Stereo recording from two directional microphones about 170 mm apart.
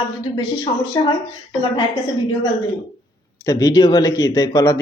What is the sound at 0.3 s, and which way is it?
Speech, 30° left (ahead or behind).